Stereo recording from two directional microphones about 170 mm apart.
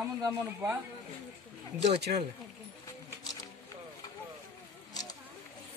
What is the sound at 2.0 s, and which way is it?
Speech, 75° right (ahead or behind).